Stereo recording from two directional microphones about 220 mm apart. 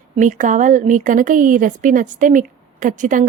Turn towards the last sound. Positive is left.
turn(degrees=-35)  # may be behind; listen again after turning